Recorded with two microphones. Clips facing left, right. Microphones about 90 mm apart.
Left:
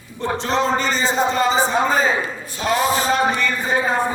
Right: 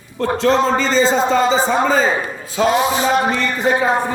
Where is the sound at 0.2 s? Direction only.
90° right.